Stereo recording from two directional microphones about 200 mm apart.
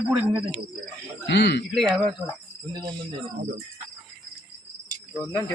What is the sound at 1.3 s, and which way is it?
Speech, 60° left (ahead or behind).